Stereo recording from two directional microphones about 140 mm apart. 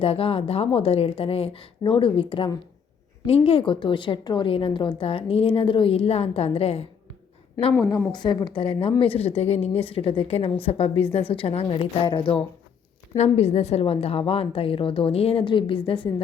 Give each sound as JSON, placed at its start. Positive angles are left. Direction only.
{"t": 0.0, "sound": "a woman's voice", "side_deg": 45}
{"t": 7.9, "sound": "a woman's voice", "side_deg": 30}
{"t": 13.1, "sound": "a woman's voice", "side_deg": 50}